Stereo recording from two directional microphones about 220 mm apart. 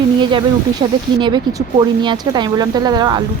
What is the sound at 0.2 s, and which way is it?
A woman's voice, 20° right (ahead or behind).